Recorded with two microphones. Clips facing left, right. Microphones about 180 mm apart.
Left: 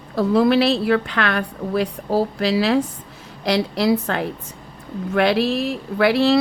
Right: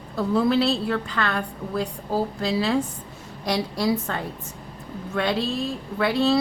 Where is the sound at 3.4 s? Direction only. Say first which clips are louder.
Left 5 dB; 90° left.